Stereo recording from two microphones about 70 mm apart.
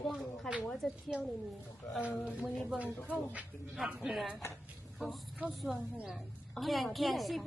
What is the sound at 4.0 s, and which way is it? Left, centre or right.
A woman's voice, centre.